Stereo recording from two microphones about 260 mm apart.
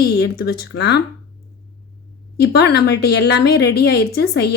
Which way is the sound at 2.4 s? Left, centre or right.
Left.